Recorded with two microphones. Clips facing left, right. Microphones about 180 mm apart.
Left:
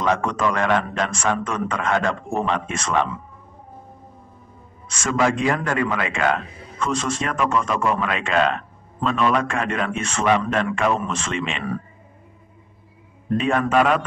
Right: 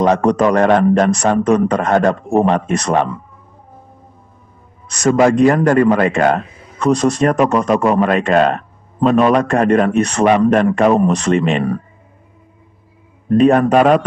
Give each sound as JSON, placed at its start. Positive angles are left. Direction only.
{"t": 0.0, "sound": "a man's voice", "side_deg": -40}
{"t": 4.8, "sound": "a man's voice", "side_deg": -40}
{"t": 13.3, "sound": "a man's voice", "side_deg": -45}